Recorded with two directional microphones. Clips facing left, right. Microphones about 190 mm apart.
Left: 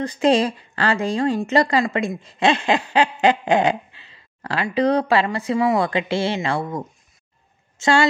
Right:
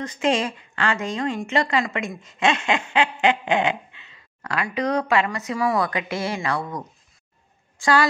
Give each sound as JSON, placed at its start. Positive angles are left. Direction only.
{"t": 0.0, "sound": "a woman's voice", "side_deg": 35}